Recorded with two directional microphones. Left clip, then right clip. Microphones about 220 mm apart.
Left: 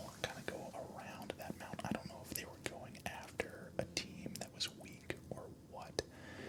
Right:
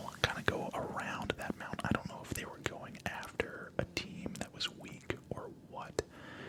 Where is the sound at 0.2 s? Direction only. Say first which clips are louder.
Right 11 dB; 35° right (ahead or behind).